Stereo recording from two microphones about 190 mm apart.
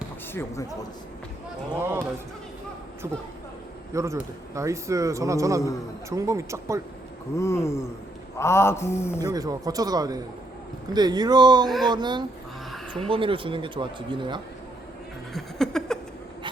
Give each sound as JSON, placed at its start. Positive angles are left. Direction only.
{"t": 1.8, "sound": "a man's voice", "side_deg": -10}
{"t": 3.9, "sound": "a man's voice", "side_deg": -15}
{"t": 7.3, "sound": "a man's voice", "side_deg": 15}
{"t": 9.2, "sound": "speech", "side_deg": -20}
{"t": 15.3, "sound": "a sound", "side_deg": 0}